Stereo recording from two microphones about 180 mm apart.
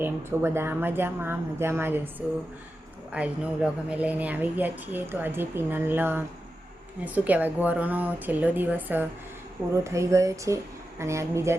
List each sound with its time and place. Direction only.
0.0 s a woman's voice: 15° right (ahead or behind)